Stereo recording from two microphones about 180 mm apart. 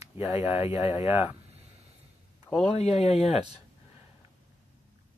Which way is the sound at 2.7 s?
35° left (ahead or behind).